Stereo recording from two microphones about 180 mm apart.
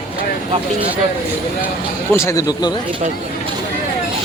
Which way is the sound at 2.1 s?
15° left (ahead or behind).